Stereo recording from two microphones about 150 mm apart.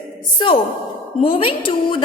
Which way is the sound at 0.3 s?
35° left (ahead or behind).